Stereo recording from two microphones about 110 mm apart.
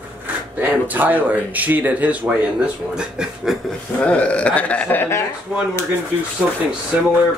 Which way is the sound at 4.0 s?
10° left (ahead or behind).